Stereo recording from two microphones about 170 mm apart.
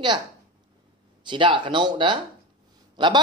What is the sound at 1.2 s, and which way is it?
Speech, 30° right (ahead or behind).